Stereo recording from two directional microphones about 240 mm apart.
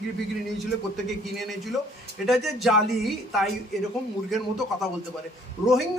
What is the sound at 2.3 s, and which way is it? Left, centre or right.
Speech, centre.